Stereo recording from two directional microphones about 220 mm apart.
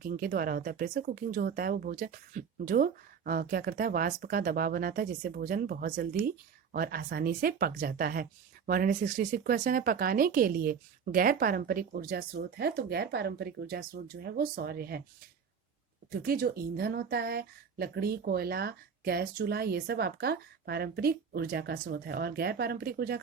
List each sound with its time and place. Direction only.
0.0 s a woman's voice: 40° right (ahead or behind)
16.2 s speech: 40° right (ahead or behind)